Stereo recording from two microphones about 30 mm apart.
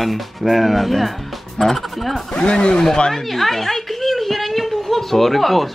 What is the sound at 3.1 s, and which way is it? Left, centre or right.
Speech, centre.